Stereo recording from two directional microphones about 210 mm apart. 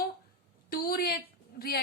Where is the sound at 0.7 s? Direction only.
45° left (ahead or behind).